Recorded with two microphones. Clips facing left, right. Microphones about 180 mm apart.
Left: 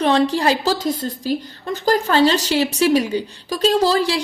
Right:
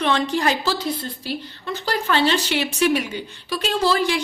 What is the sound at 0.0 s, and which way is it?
A woman's voice, 35° left (ahead or behind).